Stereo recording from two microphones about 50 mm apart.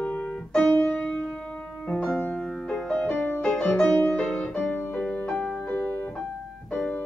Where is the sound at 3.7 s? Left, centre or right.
Centre.